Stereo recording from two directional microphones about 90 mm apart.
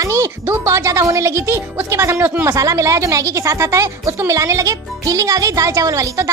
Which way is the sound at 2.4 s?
35° right (ahead or behind).